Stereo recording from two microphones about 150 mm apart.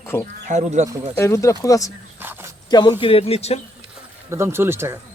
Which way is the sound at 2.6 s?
30° left (ahead or behind).